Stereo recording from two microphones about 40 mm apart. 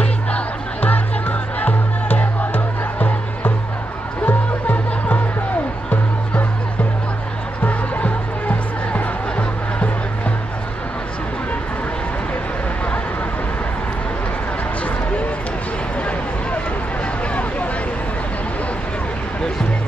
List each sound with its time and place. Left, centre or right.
0.7 s music: left
7.6 s music: left